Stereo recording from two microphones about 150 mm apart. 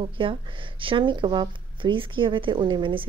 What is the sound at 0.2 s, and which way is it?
A woman's voice, 35° right (ahead or behind).